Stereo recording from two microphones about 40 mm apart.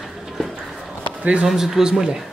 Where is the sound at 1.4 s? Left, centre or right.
Centre.